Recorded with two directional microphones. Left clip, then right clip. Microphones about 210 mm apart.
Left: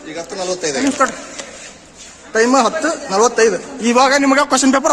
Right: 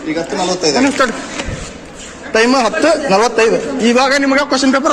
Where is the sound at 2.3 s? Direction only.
Centre (ahead or behind).